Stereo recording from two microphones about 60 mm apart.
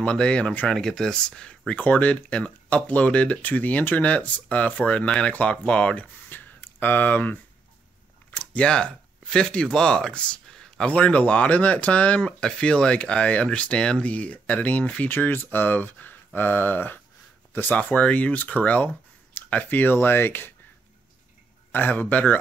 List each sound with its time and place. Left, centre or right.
0.0 s speech: centre
1.8 s speech: left
8.5 s speech: centre
15.0 s speech: left
21.7 s speech: left